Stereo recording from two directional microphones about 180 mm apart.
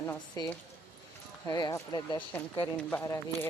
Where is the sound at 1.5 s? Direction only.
20° left (ahead or behind).